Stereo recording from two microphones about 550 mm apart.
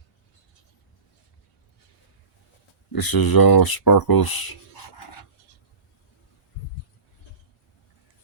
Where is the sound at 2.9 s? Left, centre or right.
Left.